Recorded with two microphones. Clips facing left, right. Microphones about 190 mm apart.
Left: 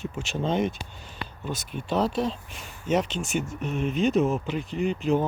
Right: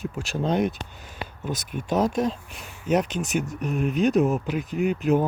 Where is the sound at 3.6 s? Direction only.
Centre (ahead or behind).